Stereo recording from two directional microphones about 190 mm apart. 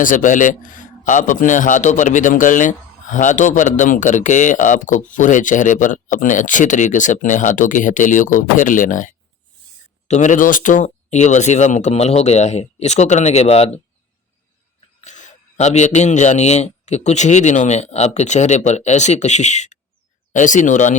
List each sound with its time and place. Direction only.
0.0 s a man's voice: 45° left (ahead or behind)
10.1 s a man's voice: 40° left (ahead or behind)
15.0 s a man's voice: 40° left (ahead or behind)